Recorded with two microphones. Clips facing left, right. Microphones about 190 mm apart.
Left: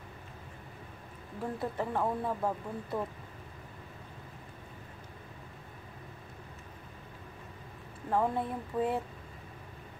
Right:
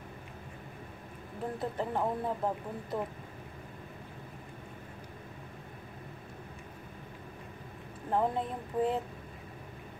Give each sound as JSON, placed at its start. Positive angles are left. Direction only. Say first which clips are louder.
{"t": 1.6, "sound": "speech", "louder": "even", "side_deg": -20}
{"t": 8.1, "sound": "speech", "louder": "even", "side_deg": -20}